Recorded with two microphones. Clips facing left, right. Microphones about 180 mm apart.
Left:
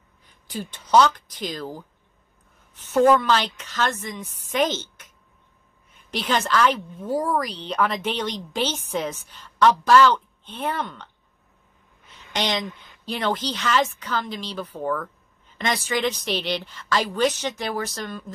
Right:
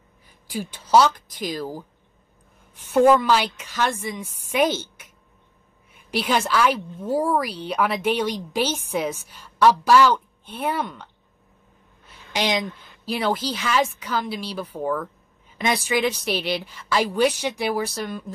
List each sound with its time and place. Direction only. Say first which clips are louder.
0.5 s a woman's voice: right 2 dB; 10° right (ahead or behind)
12.1 s a woman's voice: right 2 dB; 10° right (ahead or behind)